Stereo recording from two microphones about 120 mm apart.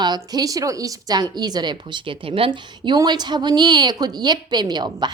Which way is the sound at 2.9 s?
35° right (ahead or behind).